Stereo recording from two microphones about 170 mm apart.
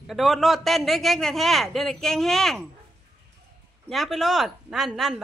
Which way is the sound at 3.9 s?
Centre (ahead or behind).